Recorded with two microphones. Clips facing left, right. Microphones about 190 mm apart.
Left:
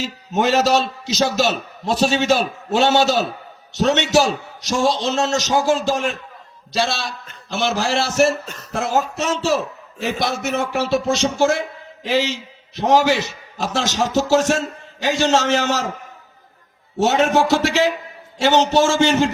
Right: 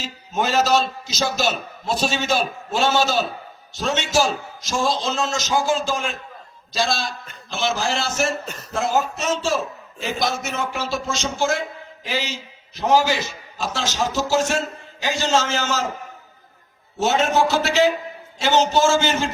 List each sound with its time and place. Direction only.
0.5 s a man's voice: 70° left (ahead or behind)
17.0 s a man's voice: 70° left (ahead or behind)